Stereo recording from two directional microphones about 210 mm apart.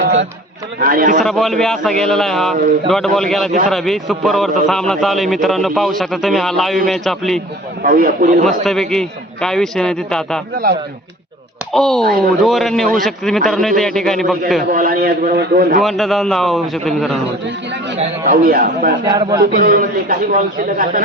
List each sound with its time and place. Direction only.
0.8 s speech: 40° right (ahead or behind)
1.2 s a man's voice: centre (ahead or behind)
7.8 s a man's voice: 45° right (ahead or behind)
8.4 s a man's voice: centre (ahead or behind)
11.7 s a man's voice: centre (ahead or behind)
12.0 s a man's voice: 45° right (ahead or behind)
12.5 s a man's voice: centre (ahead or behind)
14.7 s a man's voice: 45° right (ahead or behind)
15.8 s a man's voice: centre (ahead or behind)
17.9 s speech: 30° right (ahead or behind)
18.4 s a man's voice: 40° right (ahead or behind)
19.0 s a man's voice: 20° right (ahead or behind)
19.4 s a man's voice: 45° right (ahead or behind)